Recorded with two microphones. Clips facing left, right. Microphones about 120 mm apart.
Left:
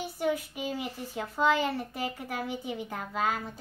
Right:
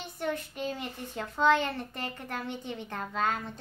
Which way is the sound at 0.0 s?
5° left (ahead or behind).